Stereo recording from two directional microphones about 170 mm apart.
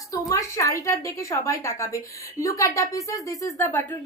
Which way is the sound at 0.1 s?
20° left (ahead or behind).